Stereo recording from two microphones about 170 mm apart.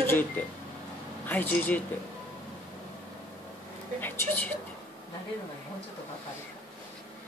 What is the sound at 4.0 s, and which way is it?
Speech, 10° left (ahead or behind).